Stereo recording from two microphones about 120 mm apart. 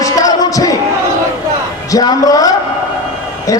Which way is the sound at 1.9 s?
30° left (ahead or behind).